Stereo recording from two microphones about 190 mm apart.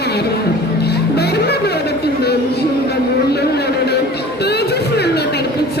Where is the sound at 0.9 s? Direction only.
60° left (ahead or behind).